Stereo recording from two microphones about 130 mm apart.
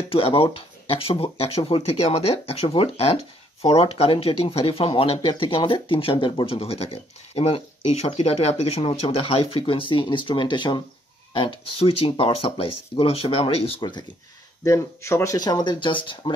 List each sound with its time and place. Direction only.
0.1 s speech: 45° left (ahead or behind)
13.7 s speech: 35° left (ahead or behind)
14.6 s speech: 20° left (ahead or behind); by 16.2 s 40° left (ahead or behind)